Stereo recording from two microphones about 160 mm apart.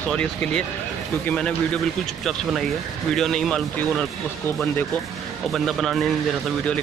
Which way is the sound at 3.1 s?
5° left (ahead or behind).